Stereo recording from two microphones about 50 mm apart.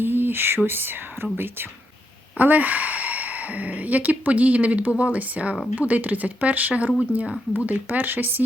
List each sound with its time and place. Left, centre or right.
0.0 s speech: right
2.4 s speech: right